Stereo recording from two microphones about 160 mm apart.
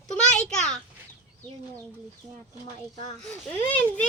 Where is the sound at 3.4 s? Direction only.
10° left (ahead or behind).